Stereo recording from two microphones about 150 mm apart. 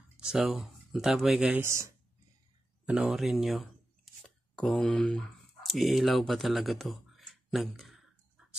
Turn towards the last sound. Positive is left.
turn(degrees=0)  # may be behind; listen again after turning